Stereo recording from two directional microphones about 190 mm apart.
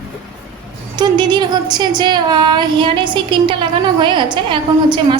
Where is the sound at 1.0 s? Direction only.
20° right (ahead or behind).